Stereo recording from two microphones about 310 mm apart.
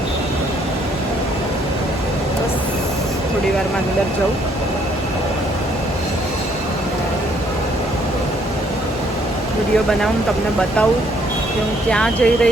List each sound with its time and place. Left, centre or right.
11.9 s speech: centre